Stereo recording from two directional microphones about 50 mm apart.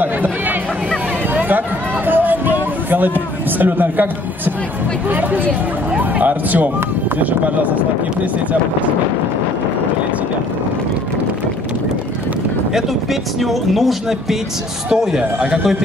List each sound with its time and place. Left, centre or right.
0.0 s chatter: right
2.0 s a sound: right
3.5 s a man's voice: right
12.7 s speech: centre
14.9 s a man's voice: centre